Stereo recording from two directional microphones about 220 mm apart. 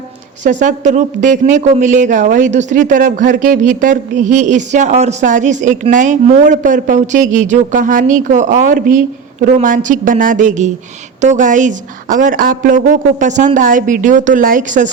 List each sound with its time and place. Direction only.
0.6 s speech: 35° right (ahead or behind)